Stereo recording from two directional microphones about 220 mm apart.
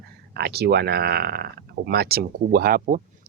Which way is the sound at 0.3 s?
45° right (ahead or behind).